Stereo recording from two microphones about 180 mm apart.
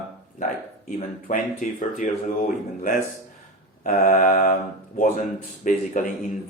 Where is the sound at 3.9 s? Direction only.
50° left (ahead or behind).